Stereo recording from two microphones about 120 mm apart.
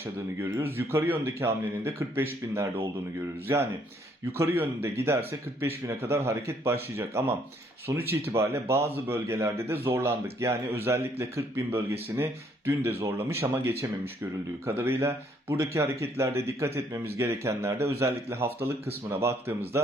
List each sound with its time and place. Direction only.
0.5 s speech: 20° right (ahead or behind)